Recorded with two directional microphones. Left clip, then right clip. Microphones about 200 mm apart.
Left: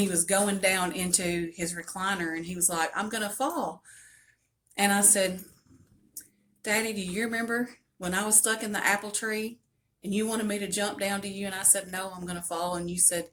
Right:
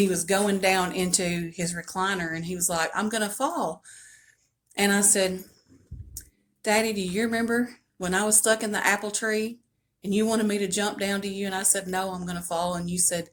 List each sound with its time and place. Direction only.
0.0 s speech: 40° right (ahead or behind)